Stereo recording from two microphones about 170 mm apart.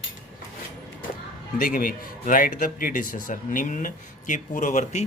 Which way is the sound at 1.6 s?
55° left (ahead or behind).